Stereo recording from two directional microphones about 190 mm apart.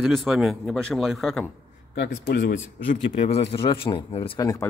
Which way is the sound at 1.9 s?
60° left (ahead or behind).